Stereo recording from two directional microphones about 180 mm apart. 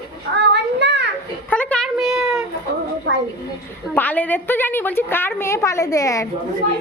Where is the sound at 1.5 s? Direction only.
5° left (ahead or behind).